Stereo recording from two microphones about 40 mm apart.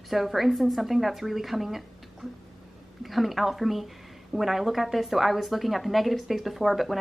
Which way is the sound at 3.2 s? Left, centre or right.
Centre.